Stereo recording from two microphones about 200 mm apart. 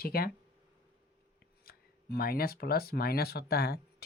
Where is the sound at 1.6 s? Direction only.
50° left (ahead or behind).